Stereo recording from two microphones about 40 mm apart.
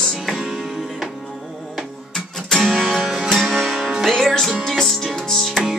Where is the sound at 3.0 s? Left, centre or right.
Centre.